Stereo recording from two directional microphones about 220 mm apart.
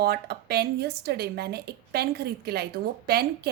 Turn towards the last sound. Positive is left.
turn(degrees=-45)  # may be behind; listen again after turning